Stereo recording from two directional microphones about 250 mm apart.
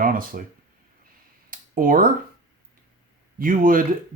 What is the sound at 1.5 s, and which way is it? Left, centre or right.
Typing, right.